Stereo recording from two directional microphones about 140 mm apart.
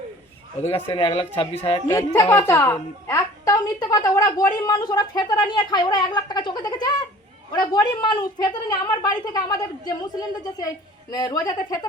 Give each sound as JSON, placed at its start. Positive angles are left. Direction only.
{"t": 0.9, "sound": "speech", "side_deg": 40}
{"t": 2.0, "sound": "a woman's voice", "side_deg": 25}